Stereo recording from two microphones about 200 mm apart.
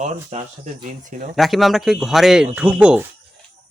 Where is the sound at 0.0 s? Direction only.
35° right (ahead or behind).